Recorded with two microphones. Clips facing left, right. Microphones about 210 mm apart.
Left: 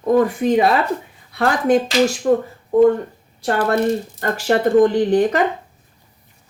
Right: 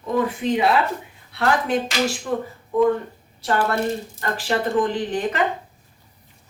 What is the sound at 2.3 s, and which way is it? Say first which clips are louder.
Speech: left 9 dB; 45° left (ahead or behind).